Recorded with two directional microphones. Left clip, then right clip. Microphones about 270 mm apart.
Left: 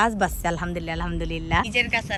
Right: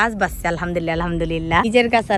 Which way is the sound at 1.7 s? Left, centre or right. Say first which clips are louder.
Right 7 dB; centre.